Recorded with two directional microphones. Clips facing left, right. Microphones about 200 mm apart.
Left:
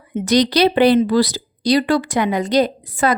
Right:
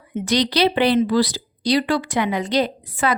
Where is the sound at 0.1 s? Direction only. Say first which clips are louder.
Left 5 dB; 45° left (ahead or behind).